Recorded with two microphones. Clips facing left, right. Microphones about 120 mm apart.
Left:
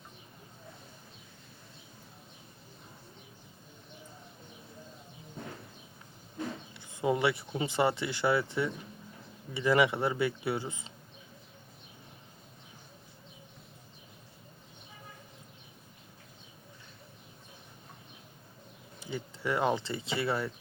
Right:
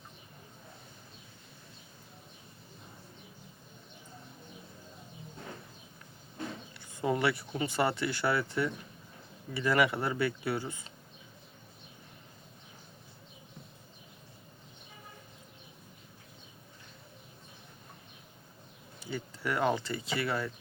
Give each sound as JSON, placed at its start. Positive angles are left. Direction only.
{"t": 6.7, "sound": "speech", "side_deg": 15}
{"t": 18.9, "sound": "speech", "side_deg": 20}